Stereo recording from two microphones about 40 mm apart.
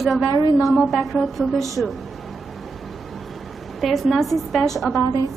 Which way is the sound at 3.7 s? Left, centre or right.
Centre.